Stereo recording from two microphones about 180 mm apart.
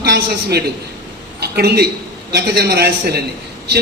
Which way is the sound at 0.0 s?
65° right (ahead or behind).